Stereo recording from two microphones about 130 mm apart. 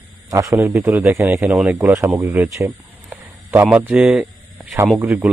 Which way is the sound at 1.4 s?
5° right (ahead or behind).